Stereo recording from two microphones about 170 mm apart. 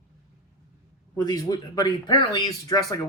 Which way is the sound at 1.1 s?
20° left (ahead or behind).